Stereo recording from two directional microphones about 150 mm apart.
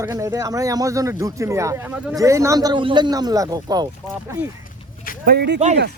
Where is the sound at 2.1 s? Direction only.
20° right (ahead or behind).